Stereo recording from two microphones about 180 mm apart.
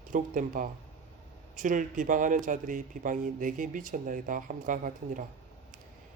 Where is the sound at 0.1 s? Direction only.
45° right (ahead or behind).